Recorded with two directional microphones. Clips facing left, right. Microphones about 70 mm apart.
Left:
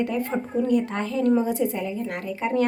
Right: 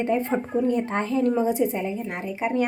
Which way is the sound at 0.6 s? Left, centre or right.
Right.